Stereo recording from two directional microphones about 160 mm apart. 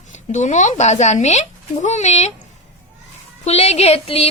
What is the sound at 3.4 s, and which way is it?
Speech, 40° left (ahead or behind).